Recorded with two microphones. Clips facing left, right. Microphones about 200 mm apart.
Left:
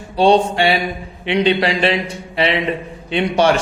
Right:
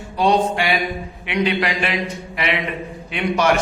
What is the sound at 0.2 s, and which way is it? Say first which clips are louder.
A man's voice: left 4 dB; 30° left (ahead or behind).